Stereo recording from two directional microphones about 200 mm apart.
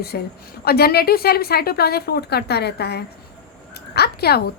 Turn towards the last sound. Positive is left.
turn(degrees=55)  # may be behind; listen again after turning